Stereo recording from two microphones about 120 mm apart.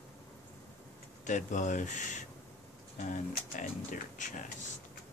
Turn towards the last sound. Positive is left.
turn(degrees=90)